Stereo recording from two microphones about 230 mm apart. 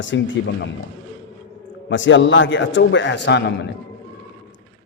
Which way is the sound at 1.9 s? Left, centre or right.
Left.